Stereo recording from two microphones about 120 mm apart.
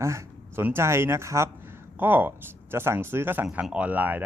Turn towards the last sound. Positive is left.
turn(degrees=-15)  # may be behind; listen again after turning